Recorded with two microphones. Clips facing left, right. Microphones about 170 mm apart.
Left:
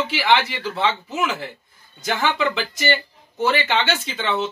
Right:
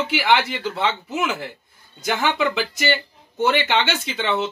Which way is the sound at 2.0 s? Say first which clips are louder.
Even; 10° right (ahead or behind).